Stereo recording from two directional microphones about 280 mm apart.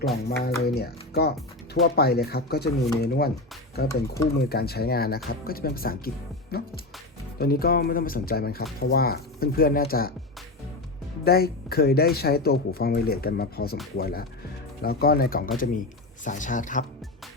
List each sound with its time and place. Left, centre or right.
0.1 s speech: left
11.3 s speech: left